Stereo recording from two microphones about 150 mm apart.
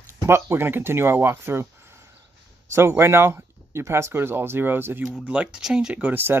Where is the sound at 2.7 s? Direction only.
15° right (ahead or behind).